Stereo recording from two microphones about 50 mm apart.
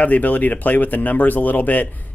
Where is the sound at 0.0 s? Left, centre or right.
Left.